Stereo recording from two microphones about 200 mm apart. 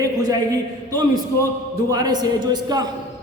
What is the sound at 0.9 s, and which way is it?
A man's voice, 20° right (ahead or behind).